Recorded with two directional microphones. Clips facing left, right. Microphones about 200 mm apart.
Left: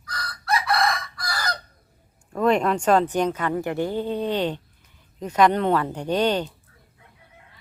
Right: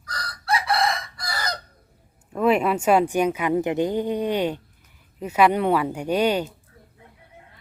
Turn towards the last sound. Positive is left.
turn(degrees=-10)  # may be behind; listen again after turning